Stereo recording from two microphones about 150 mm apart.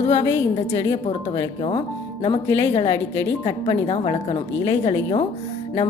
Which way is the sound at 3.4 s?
40° left (ahead or behind).